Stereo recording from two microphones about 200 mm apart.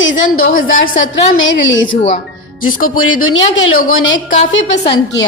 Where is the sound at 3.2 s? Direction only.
75° left (ahead or behind).